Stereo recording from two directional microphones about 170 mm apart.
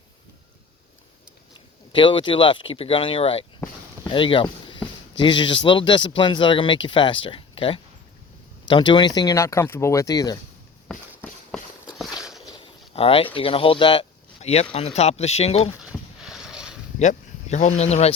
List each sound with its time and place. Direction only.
1.9 s speech: 30° left (ahead or behind)
3.6 s a sound: 25° left (ahead or behind)
5.1 s speech: 30° left (ahead or behind)
10.9 s walk: 5° left (ahead or behind)
12.5 s speech: 35° left (ahead or behind)
15.7 s a sound: 5° right (ahead or behind)
17.0 s speech: 45° left (ahead or behind)